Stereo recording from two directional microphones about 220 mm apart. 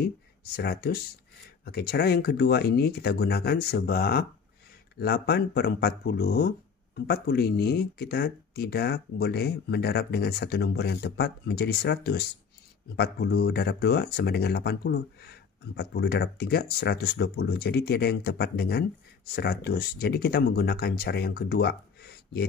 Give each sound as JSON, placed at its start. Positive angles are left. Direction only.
{"t": 0.6, "sound": "speech", "side_deg": 45}